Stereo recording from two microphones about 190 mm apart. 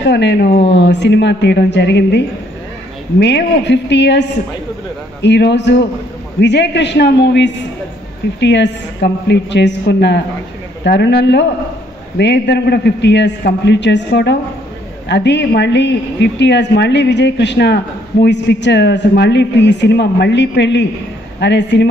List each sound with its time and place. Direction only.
0.0 s a woman's voice: 65° left (ahead or behind)